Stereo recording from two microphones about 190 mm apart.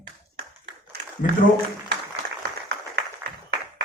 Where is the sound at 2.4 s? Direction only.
60° right (ahead or behind).